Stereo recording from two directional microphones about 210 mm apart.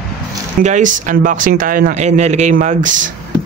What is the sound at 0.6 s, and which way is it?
Speech, 35° right (ahead or behind).